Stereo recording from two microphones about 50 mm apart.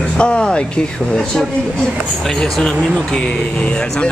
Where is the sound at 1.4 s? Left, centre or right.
Centre.